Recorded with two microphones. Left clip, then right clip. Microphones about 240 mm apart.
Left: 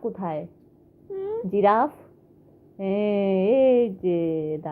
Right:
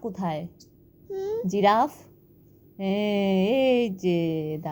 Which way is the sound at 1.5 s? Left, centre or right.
Right.